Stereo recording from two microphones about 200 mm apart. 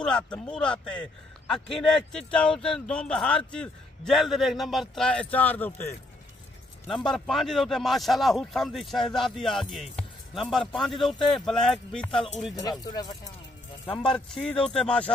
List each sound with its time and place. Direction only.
0.0 s speech: 5° left (ahead or behind)
7.1 s speech: centre (ahead or behind)
12.5 s speech: 20° left (ahead or behind)
14.1 s speech: 5° left (ahead or behind)